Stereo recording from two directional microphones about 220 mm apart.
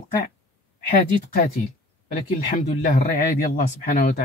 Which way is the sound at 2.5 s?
40° left (ahead or behind).